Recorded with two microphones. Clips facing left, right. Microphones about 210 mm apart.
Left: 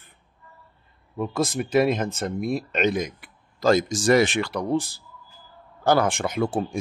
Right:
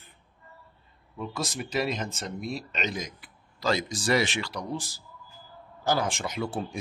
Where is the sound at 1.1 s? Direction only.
55° left (ahead or behind).